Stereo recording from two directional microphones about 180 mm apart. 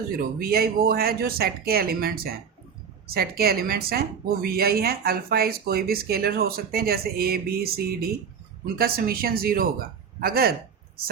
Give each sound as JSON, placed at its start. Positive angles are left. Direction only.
{"t": 0.3, "sound": "speech", "side_deg": -55}